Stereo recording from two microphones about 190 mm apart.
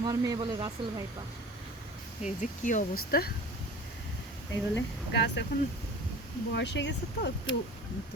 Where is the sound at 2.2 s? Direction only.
40° left (ahead or behind).